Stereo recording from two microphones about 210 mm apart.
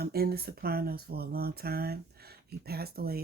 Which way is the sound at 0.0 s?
45° right (ahead or behind).